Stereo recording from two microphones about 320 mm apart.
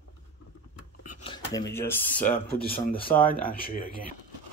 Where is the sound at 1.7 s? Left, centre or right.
Centre.